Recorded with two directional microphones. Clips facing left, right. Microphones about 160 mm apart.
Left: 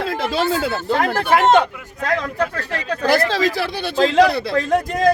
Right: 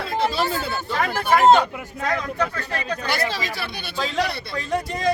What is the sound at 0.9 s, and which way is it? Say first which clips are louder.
Speech: left 2 dB; 60° left (ahead or behind).